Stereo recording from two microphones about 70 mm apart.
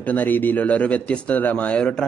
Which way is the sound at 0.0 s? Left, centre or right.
Left.